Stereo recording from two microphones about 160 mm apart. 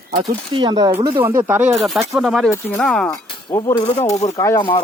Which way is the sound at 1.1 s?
15° right (ahead or behind).